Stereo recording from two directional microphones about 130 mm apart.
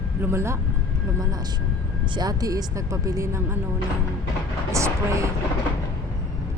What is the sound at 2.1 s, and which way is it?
Speech, 30° right (ahead or behind).